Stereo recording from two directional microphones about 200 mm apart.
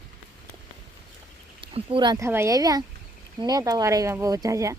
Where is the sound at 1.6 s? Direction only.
25° right (ahead or behind).